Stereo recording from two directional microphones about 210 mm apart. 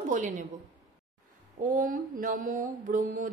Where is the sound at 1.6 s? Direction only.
40° right (ahead or behind).